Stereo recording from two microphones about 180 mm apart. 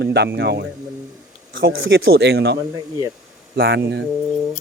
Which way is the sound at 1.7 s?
90° right.